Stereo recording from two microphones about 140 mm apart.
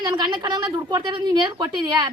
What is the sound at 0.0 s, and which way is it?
A woman's voice, 30° right (ahead or behind).